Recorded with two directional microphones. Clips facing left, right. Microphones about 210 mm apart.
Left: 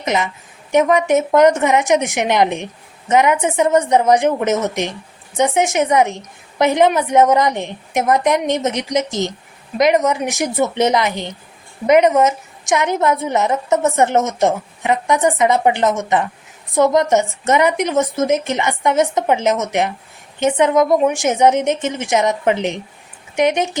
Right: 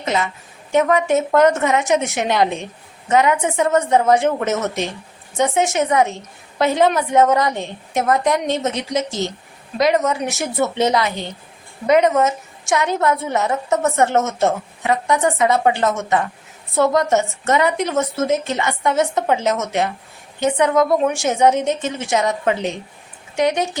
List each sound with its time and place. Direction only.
0.0 s a woman's voice: 20° left (ahead or behind)